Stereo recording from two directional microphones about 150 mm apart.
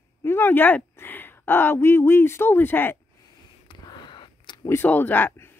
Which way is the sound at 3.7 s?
30° left (ahead or behind).